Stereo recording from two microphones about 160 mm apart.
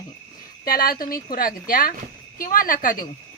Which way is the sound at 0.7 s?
65° left (ahead or behind).